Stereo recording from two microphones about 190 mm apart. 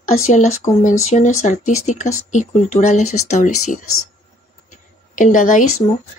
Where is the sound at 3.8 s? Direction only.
90° left.